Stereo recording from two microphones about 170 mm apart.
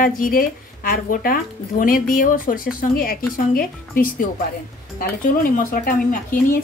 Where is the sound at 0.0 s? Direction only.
55° left (ahead or behind).